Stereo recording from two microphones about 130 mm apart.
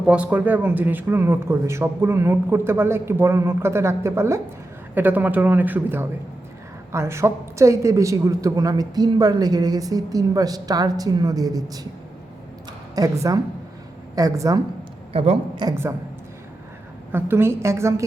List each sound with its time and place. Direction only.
0.0 s a woman's voice: 10° right (ahead or behind); by 11.9 s 30° right (ahead or behind)
13.0 s a woman's voice: 25° right (ahead or behind)
15.1 s a woman's voice: 50° right (ahead or behind)
15.7 s a woman's voice: 20° right (ahead or behind)
17.1 s a woman's voice: 15° right (ahead or behind)